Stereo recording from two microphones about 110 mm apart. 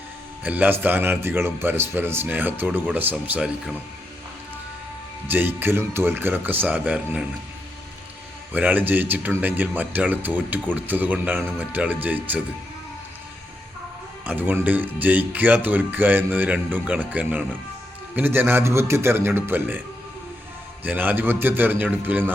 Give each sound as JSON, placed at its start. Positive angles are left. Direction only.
{"t": 0.4, "sound": "a man's voice", "side_deg": -15}
{"t": 5.3, "sound": "speech", "side_deg": -20}
{"t": 8.5, "sound": "speech", "side_deg": -15}
{"t": 14.3, "sound": "a man's voice", "side_deg": -15}
{"t": 20.8, "sound": "speech", "side_deg": -15}